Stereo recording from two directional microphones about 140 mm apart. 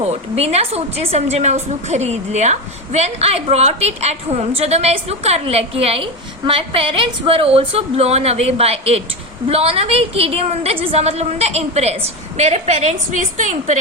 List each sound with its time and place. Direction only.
0.0 s a woman's voice: 50° right (ahead or behind)